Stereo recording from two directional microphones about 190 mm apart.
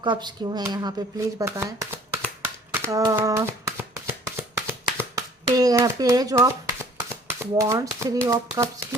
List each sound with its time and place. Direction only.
0.0 s speech: 25° right (ahead or behind)
2.7 s shuffling cards: 15° right (ahead or behind)
7.3 s speech: 15° right (ahead or behind)